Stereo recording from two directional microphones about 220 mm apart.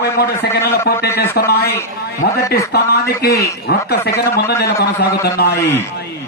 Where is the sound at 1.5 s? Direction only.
45° left (ahead or behind).